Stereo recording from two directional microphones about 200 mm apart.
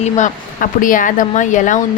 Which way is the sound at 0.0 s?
40° left (ahead or behind).